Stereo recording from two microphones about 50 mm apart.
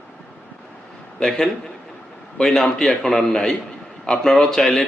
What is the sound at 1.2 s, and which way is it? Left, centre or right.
Speech, centre.